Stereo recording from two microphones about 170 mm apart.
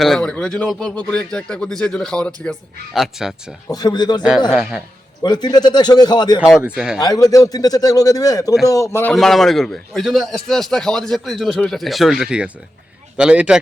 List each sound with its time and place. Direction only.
0.0 s a man's voice: 5° left (ahead or behind)
3.7 s a man's voice: 25° left (ahead or behind)
4.4 s a man's voice: centre (ahead or behind)
5.2 s a man's voice: 25° left (ahead or behind)
6.6 s a man's voice: 5° right (ahead or behind)
7.0 s a man's voice: 20° left (ahead or behind)
9.1 s a man's voice: centre (ahead or behind)